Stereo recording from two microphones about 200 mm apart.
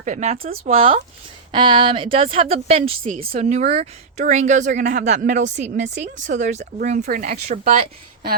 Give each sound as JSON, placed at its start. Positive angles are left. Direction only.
{"t": 0.0, "sound": "a woman's voice", "side_deg": -35}